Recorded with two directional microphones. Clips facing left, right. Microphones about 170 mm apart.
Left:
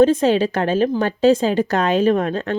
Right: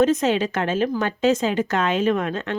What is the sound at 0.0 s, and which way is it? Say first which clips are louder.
A woman's voice: left 4 dB; 30° left (ahead or behind).